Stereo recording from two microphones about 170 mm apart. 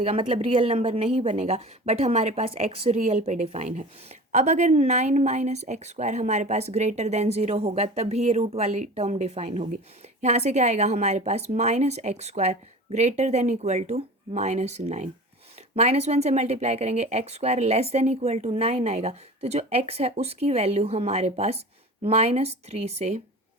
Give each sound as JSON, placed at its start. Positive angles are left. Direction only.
{"t": 0.0, "sound": "speech", "side_deg": -35}